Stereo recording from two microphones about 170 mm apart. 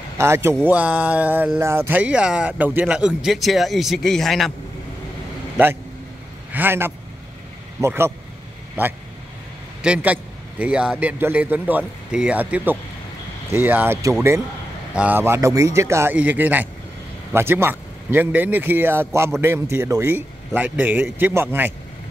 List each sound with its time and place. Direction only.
0.2 s a man's voice: 15° right (ahead or behind); by 4.5 s centre (ahead or behind)
6.5 s a man's voice: 10° right (ahead or behind)
9.8 s a man's voice: 5° right (ahead or behind)